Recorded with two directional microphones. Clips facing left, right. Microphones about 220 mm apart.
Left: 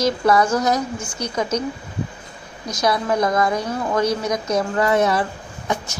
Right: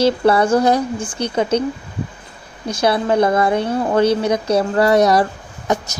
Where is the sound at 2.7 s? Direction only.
30° right (ahead or behind).